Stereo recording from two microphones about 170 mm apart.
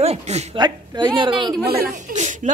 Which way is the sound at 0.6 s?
25° right (ahead or behind).